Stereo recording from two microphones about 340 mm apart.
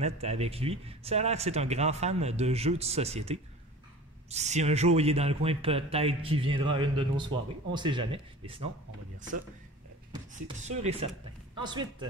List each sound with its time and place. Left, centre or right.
0.0 s a man's voice: centre
10.1 s a man's voice: centre